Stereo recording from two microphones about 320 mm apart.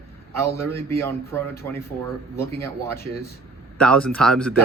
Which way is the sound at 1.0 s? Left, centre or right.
Centre.